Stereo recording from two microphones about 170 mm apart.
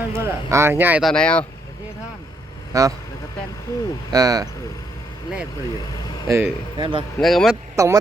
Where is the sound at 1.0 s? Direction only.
5° left (ahead or behind).